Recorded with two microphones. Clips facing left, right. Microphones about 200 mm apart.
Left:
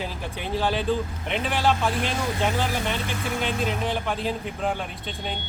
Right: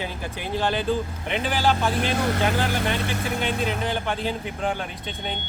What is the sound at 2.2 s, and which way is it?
Speech, 65° right (ahead or behind).